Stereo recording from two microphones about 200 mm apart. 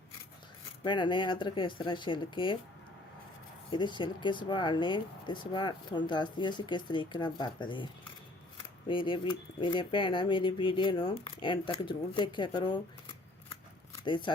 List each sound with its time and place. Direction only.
0.9 s speech: 25° left (ahead or behind)
3.7 s speech: 25° left (ahead or behind)
8.9 s speech: 25° left (ahead or behind)
14.0 s speech: 25° left (ahead or behind)